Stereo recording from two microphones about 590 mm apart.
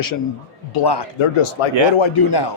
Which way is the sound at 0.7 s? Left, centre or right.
Left.